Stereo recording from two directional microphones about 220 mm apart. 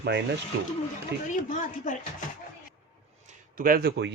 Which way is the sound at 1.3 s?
35° left (ahead or behind).